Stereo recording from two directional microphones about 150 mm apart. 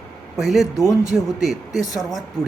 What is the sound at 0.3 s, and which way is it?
Speech, centre (ahead or behind).